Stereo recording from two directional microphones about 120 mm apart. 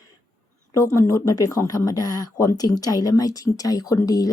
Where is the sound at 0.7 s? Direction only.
25° left (ahead or behind).